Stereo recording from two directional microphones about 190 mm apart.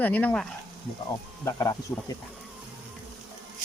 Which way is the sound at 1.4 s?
20° left (ahead or behind).